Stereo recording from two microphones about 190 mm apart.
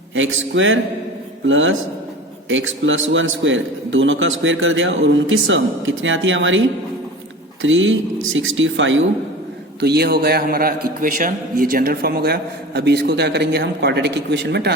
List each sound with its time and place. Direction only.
0.1 s a man's voice: 90° right
7.6 s speech: 90° right
9.8 s a man's voice: 60° right (ahead or behind)